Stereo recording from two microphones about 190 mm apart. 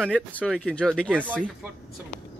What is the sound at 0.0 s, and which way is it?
Speech, 5° left (ahead or behind).